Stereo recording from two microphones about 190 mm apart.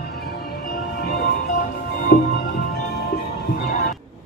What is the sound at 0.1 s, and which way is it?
Music, 55° left (ahead or behind).